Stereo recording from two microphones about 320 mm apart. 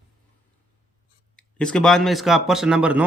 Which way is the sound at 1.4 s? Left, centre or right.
Centre.